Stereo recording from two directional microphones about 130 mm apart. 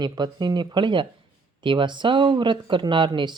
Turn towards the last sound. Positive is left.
turn(degrees=-35)  # may be behind; listen again after turning